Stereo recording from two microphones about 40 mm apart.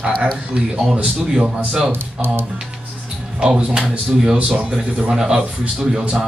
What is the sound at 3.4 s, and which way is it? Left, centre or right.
Speech, right.